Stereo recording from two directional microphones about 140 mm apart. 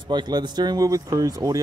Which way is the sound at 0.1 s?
30° right (ahead or behind).